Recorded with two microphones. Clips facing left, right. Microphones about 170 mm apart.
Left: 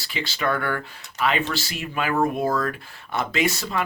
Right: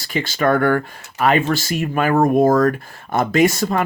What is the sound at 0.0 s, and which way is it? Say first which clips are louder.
Speech: right 8 dB; 50° right (ahead or behind).